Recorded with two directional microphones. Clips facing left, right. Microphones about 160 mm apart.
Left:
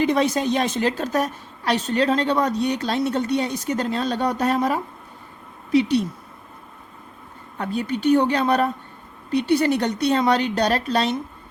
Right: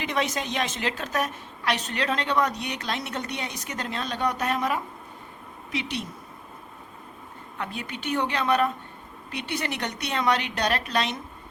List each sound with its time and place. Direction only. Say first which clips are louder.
0.0 s a woman's voice: left 8 dB; 35° left (ahead or behind)
7.6 s a woman's voice: left 11 dB; 35° left (ahead or behind)